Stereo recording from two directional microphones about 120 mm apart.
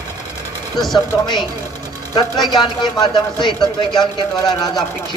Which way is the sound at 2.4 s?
40° left (ahead or behind).